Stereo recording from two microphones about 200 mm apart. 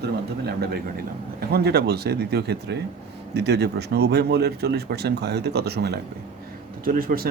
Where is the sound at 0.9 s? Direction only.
50° right (ahead or behind).